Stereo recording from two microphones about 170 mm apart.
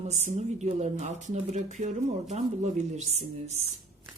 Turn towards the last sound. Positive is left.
turn(degrees=-40)  # may be behind; listen again after turning